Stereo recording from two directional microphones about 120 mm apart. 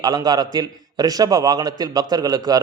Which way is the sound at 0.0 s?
35° right (ahead or behind).